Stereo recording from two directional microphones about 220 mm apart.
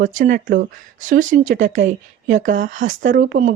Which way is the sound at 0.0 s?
35° right (ahead or behind).